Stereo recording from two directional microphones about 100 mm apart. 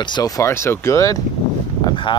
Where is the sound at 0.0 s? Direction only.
50° left (ahead or behind).